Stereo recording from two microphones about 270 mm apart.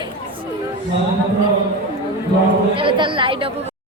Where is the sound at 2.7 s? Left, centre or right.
Centre.